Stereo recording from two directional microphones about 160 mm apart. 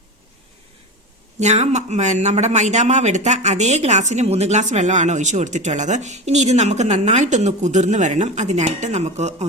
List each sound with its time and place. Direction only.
1.4 s a man's voice: 45° right (ahead or behind)